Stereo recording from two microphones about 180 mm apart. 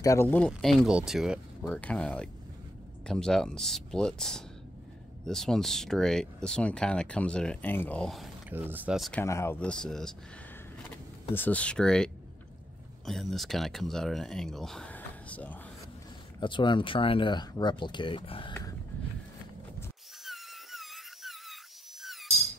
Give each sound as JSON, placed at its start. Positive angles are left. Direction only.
{"t": 0.0, "sound": "speech", "side_deg": 15}
{"t": 0.5, "sound": "speech", "side_deg": 0}
{"t": 1.7, "sound": "speech", "side_deg": 5}
{"t": 8.5, "sound": "speech", "side_deg": -10}
{"t": 9.2, "sound": "speech", "side_deg": 15}
{"t": 11.3, "sound": "speech", "side_deg": 10}
{"t": 16.3, "sound": "speech", "side_deg": 25}
{"t": 20.2, "sound": "a sound", "side_deg": 0}